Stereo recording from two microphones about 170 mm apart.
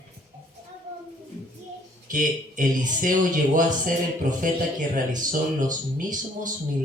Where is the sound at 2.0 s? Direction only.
50° right (ahead or behind).